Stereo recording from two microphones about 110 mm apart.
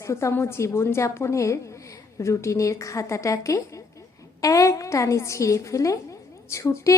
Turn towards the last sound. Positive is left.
turn(degrees=25)  # may be behind; listen again after turning